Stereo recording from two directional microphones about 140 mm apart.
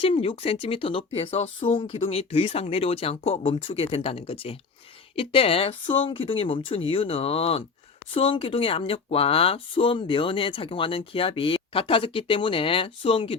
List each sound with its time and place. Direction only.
0.0 s speech: 40° left (ahead or behind)